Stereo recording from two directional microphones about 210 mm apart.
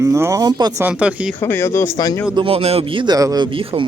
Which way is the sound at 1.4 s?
10° left (ahead or behind).